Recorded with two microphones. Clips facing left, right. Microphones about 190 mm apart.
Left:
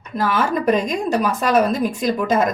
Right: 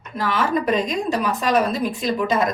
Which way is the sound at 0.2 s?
40° left (ahead or behind).